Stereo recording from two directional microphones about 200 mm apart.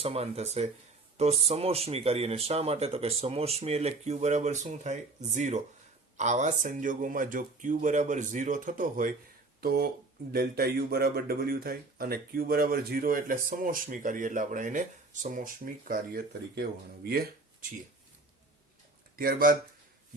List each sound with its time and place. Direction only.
0.0 s a man's voice: 30° right (ahead or behind)
19.1 s speech: 45° right (ahead or behind)